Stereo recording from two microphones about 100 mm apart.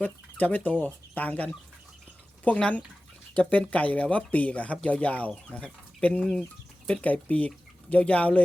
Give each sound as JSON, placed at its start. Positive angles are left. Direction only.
{"t": 0.0, "sound": "speech", "side_deg": 15}